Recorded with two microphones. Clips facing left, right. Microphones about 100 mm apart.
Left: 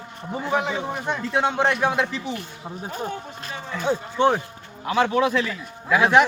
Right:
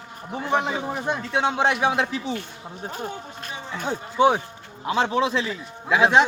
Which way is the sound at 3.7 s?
10° right (ahead or behind).